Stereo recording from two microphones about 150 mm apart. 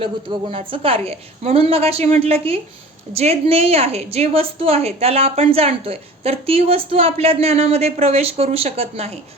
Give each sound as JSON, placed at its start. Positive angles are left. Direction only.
{"t": 0.0, "sound": "a woman's voice", "side_deg": -35}